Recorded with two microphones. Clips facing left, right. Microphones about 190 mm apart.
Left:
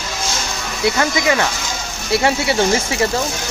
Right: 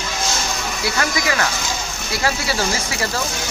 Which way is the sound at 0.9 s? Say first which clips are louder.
Left 6 dB; 25° left (ahead or behind).